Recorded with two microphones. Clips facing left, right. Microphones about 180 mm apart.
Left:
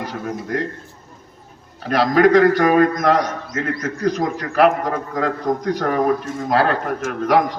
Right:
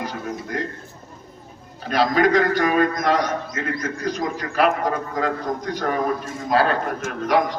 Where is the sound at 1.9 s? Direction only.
60° left (ahead or behind).